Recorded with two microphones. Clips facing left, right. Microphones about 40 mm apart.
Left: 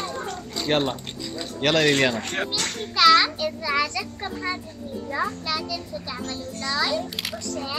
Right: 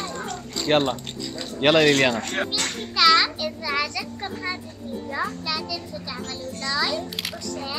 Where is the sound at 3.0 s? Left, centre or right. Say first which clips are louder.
Left 1 dB; centre.